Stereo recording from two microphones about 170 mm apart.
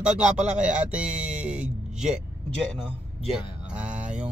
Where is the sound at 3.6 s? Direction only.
5° right (ahead or behind).